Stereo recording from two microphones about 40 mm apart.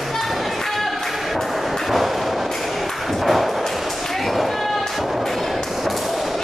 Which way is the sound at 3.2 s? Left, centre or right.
Centre.